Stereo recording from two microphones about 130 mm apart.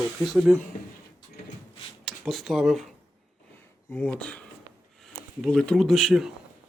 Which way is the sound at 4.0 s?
10° left (ahead or behind).